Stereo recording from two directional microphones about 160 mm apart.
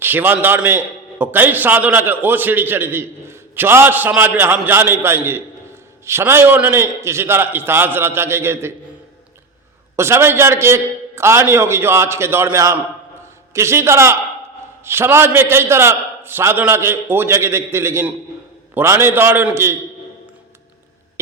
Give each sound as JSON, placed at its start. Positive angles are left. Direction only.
{"t": 0.0, "sound": "a man's voice", "side_deg": -15}
{"t": 9.9, "sound": "a man's voice", "side_deg": -15}